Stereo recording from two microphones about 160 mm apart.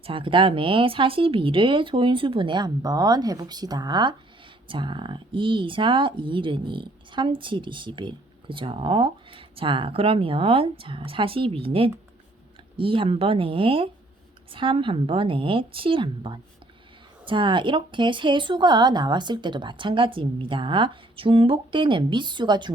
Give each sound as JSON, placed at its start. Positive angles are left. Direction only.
{"t": 0.0, "sound": "speech", "side_deg": -35}